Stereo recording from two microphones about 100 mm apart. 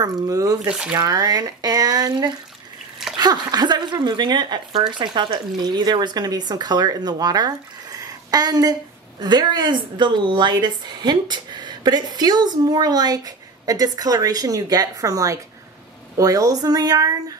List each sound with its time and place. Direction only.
0.0 s speech: 35° right (ahead or behind)
0.7 s speech: 10° right (ahead or behind)
0.9 s a woman's voice: 35° right (ahead or behind)